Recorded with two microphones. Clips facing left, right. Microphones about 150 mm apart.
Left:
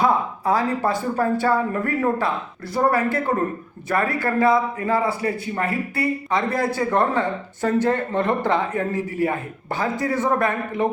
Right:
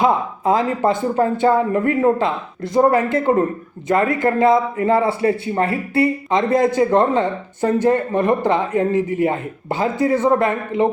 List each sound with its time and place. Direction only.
0.0 s a man's voice: 20° right (ahead or behind)